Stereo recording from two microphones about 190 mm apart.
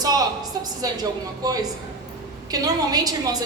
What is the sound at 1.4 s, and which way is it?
A woman's voice, 20° right (ahead or behind).